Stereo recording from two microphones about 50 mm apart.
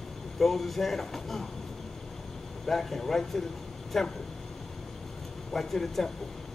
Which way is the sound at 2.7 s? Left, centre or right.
Centre.